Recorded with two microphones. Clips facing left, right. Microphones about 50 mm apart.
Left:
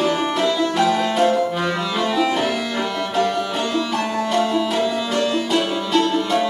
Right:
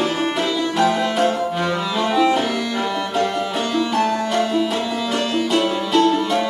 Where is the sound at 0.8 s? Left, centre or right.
Centre.